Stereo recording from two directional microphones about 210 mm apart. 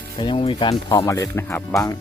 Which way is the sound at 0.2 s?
25° left (ahead or behind).